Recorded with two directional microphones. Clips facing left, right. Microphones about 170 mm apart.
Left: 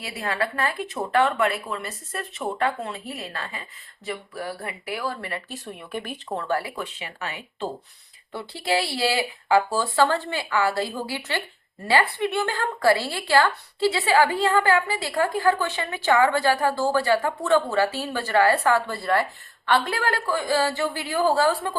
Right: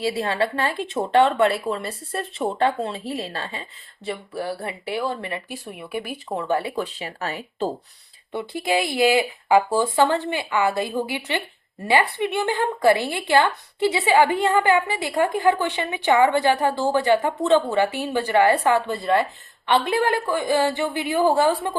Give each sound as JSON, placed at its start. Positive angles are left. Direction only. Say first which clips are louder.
{"t": 0.0, "sound": "a woman's voice", "louder": "right 5 dB", "side_deg": -30}
{"t": 6.6, "sound": "speech", "louder": "right 5 dB", "side_deg": -30}
{"t": 8.3, "sound": "a woman's voice", "louder": "right 2 dB", "side_deg": -20}